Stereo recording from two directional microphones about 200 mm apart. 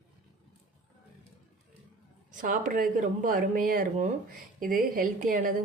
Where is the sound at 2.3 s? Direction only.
40° right (ahead or behind).